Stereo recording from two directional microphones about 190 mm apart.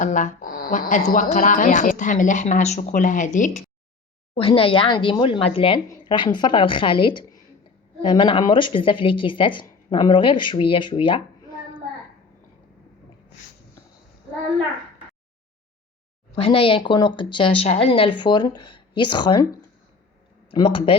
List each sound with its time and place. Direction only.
0.0 s a woman's voice: 40° left (ahead or behind)
4.4 s speech: 30° left (ahead or behind)
16.3 s speech: 30° left (ahead or behind)
20.5 s speech: 30° left (ahead or behind)